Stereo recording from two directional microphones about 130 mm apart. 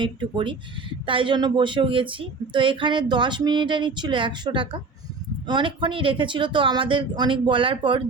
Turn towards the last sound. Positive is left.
turn(degrees=-40)  # may be behind; listen again after turning